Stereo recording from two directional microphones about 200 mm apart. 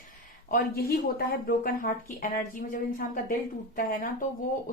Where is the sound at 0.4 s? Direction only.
50° left (ahead or behind).